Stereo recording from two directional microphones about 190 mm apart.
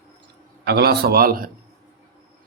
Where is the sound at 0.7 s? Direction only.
55° right (ahead or behind).